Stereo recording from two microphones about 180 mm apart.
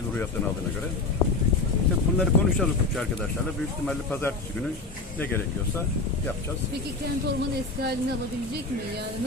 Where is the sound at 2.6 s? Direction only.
5° left (ahead or behind).